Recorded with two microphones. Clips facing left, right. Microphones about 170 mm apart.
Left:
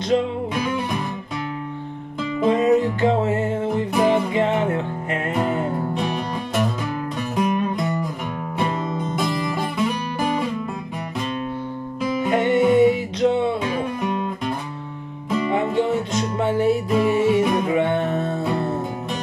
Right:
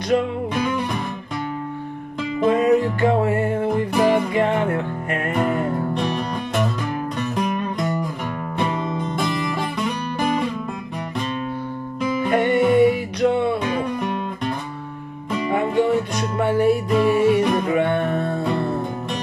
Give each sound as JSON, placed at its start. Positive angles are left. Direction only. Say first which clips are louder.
{"t": 2.4, "sound": "music", "louder": "even", "side_deg": 20}
{"t": 5.9, "sound": "music", "louder": "right 1 dB", "side_deg": 5}
{"t": 9.1, "sound": "music", "louder": "left 1 dB", "side_deg": 0}
{"t": 12.3, "sound": "music", "louder": "even", "side_deg": 20}
{"t": 13.7, "sound": "music", "louder": "right 1 dB", "side_deg": 0}
{"t": 15.5, "sound": "music", "louder": "right 3 dB", "side_deg": 20}
{"t": 17.4, "sound": "music", "louder": "even", "side_deg": 5}
{"t": 17.7, "sound": "music", "louder": "even", "side_deg": 20}
{"t": 18.4, "sound": "music", "louder": "right 1 dB", "side_deg": 5}